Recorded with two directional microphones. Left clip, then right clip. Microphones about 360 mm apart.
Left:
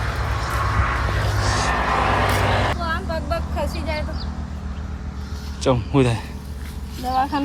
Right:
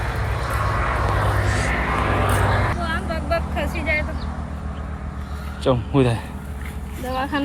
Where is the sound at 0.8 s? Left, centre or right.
Centre.